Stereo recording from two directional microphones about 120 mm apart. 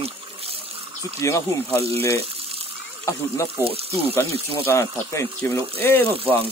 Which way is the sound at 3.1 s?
25° left (ahead or behind).